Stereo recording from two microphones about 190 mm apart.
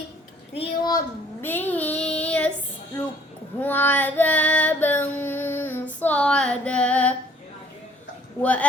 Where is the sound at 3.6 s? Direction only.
10° left (ahead or behind).